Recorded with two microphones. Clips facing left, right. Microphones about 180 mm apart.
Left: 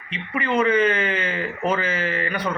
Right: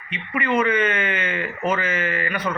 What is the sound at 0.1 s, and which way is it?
A man's voice, 30° left (ahead or behind).